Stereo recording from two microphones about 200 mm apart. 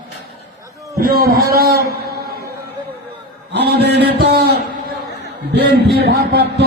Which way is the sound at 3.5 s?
55° right (ahead or behind).